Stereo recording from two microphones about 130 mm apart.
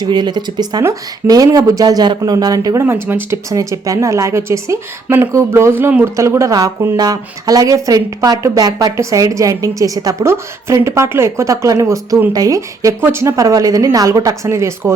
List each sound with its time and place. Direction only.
0.0 s a woman's voice: 35° right (ahead or behind)
2.8 s a woman's voice: 15° right (ahead or behind)